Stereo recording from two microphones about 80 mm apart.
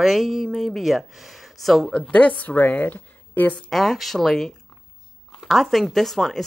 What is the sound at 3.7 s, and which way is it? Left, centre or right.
Speech, centre.